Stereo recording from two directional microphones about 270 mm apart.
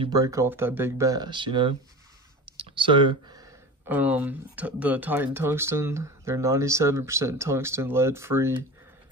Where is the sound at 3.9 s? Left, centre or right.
Centre.